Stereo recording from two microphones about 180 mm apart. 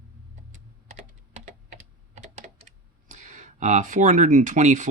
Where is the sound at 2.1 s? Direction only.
40° right (ahead or behind).